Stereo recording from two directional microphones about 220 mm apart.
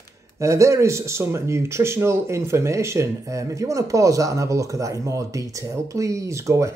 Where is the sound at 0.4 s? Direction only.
15° right (ahead or behind).